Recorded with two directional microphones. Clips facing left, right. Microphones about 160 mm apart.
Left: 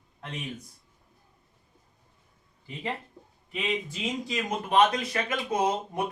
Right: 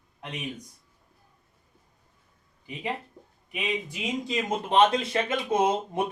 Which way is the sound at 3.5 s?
15° right (ahead or behind).